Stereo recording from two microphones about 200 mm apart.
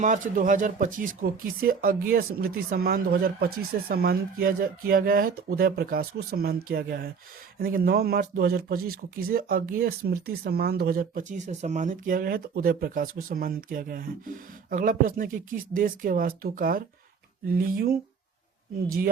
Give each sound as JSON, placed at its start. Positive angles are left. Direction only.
{"t": 0.0, "sound": "speech", "side_deg": -40}